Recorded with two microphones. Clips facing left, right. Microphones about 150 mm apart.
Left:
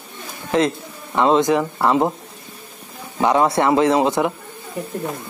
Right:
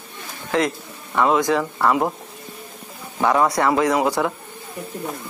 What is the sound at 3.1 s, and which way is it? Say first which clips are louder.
A man's voice: left 2 dB; 20° left (ahead or behind).